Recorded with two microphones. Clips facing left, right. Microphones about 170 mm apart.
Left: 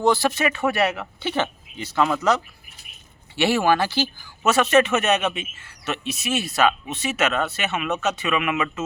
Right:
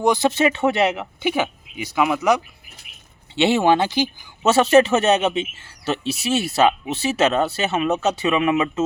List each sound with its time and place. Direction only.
0.0 s speech: 20° right (ahead or behind)
4.4 s speech: 30° right (ahead or behind)